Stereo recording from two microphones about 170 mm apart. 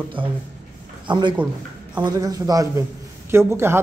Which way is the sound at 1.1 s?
30° right (ahead or behind).